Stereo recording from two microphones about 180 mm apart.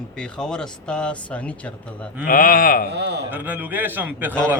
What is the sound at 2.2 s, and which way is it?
Speech, 50° left (ahead or behind).